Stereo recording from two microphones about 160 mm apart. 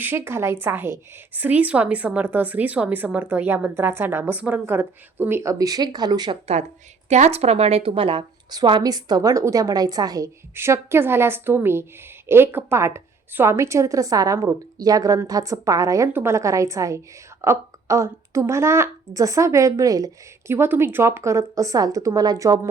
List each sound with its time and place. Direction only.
0.0 s a woman's voice: 15° right (ahead or behind)
7.1 s a woman's voice: 40° right (ahead or behind); by 22.7 s 20° right (ahead or behind)